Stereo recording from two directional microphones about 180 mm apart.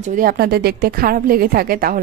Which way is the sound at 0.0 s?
50° right (ahead or behind).